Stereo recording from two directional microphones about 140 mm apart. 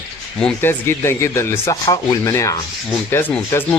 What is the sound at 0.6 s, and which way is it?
Speech, 15° left (ahead or behind).